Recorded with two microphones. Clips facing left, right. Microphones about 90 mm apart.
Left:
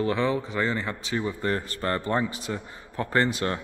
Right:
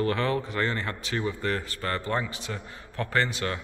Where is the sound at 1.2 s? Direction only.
20° left (ahead or behind).